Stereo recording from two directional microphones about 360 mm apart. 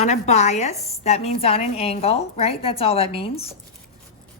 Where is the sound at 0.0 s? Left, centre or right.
Centre.